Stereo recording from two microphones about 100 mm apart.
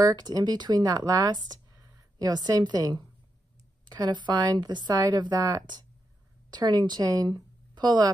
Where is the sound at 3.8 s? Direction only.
45° right (ahead or behind).